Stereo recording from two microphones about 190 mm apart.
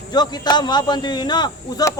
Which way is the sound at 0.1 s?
20° left (ahead or behind).